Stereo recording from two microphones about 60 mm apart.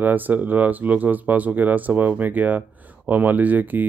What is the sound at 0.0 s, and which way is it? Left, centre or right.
Speech, right.